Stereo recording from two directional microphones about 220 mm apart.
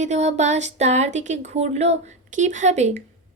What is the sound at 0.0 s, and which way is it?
A woman's voice, 30° right (ahead or behind).